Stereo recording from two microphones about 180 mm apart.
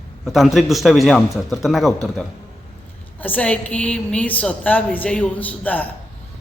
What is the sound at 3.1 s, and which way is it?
A woman's voice, 10° left (ahead or behind).